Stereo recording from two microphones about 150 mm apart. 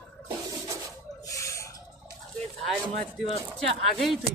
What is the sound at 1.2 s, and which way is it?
Owl, 20° left (ahead or behind).